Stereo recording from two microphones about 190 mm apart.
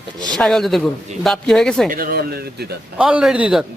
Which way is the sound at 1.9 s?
50° right (ahead or behind).